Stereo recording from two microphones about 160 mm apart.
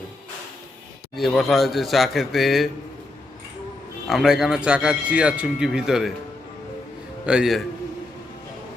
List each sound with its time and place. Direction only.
1.1 s speech: centre (ahead or behind)
4.0 s speech: centre (ahead or behind)
7.3 s speech: 5° right (ahead or behind)